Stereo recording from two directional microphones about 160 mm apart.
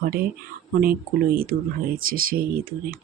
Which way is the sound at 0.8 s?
70° right (ahead or behind).